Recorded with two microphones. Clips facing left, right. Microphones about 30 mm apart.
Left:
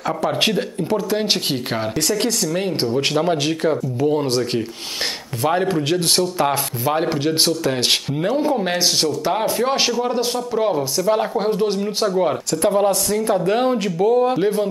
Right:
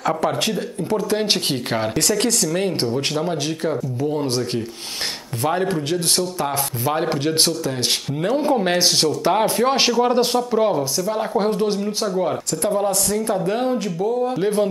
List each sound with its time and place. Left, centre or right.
0.8 s speech: centre
3.2 s speech: left
6.8 s speech: centre
10.6 s speech: centre
12.2 s speech: centre
14.4 s speech: centre